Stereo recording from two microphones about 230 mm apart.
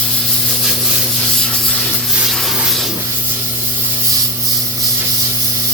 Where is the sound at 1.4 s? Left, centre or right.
Centre.